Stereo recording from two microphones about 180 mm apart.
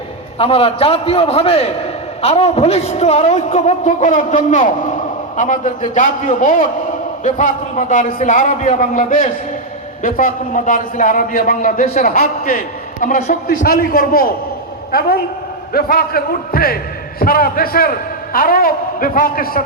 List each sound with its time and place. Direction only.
0.3 s a woman's voice: 30° left (ahead or behind); by 19.6 s 50° left (ahead or behind)